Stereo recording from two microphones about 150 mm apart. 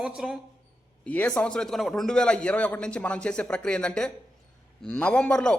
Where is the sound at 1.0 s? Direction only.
10° left (ahead or behind).